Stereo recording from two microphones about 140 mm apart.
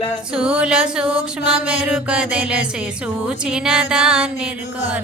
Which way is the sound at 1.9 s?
10° right (ahead or behind).